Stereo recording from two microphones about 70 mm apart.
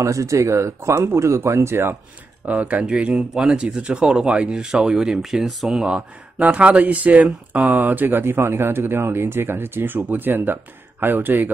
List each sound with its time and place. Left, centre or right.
0.0 s speech: right
2.4 s speech: right